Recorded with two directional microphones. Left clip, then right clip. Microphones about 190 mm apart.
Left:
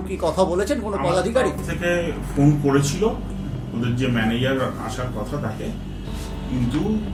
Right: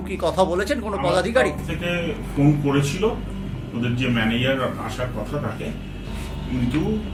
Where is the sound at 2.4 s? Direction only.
5° right (ahead or behind).